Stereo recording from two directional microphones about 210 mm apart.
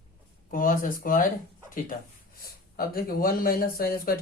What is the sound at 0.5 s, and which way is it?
Speech, 40° left (ahead or behind).